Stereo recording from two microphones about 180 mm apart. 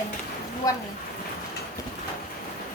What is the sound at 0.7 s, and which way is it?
Speech, 20° left (ahead or behind).